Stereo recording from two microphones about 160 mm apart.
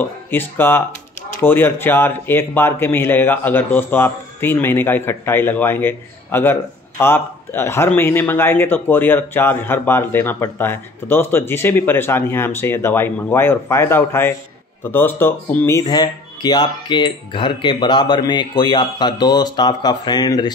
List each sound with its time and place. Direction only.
0.0 s speech: 15° left (ahead or behind)